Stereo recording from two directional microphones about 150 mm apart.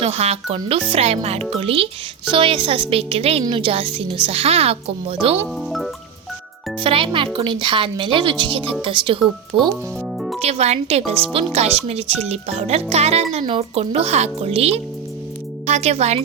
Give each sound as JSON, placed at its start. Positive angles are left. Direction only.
{"t": 0.0, "sound": "speech", "side_deg": -45}
{"t": 5.5, "sound": "music", "side_deg": 0}
{"t": 6.8, "sound": "a child's voice", "side_deg": -35}
{"t": 10.2, "sound": "music", "side_deg": 0}
{"t": 10.4, "sound": "speech", "side_deg": -45}